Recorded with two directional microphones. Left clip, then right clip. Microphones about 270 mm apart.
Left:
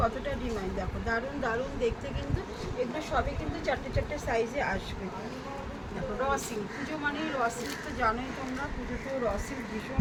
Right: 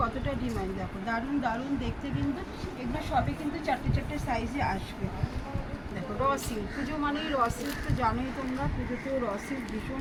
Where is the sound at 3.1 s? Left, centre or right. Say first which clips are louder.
Right 2 dB; left.